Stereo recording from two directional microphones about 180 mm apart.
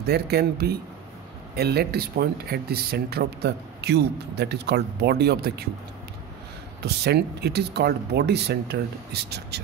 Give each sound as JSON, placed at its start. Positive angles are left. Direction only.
{"t": 0.0, "sound": "speech", "side_deg": -60}
{"t": 6.8, "sound": "speech", "side_deg": -65}